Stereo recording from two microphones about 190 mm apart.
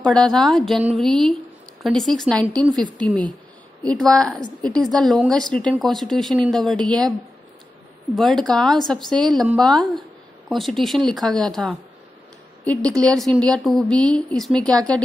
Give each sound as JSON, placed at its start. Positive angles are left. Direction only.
{"t": 0.0, "sound": "speech", "side_deg": 5}
{"t": 2.5, "sound": "a woman's voice", "side_deg": -20}
{"t": 4.0, "sound": "speech", "side_deg": 5}
{"t": 8.2, "sound": "speech", "side_deg": 0}